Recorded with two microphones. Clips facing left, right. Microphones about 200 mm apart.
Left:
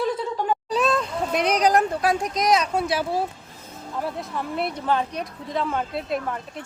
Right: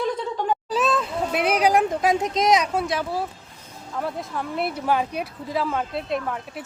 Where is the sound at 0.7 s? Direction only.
Centre (ahead or behind).